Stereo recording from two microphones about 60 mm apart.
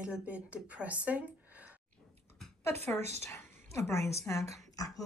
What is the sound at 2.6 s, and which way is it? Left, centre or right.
A woman's voice, left.